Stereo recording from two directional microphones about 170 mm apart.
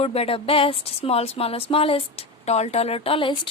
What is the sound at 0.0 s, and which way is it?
Speech, 35° left (ahead or behind).